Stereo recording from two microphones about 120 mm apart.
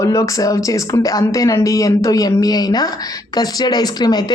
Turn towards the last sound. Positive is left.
turn(degrees=35)  # may be behind; listen again after turning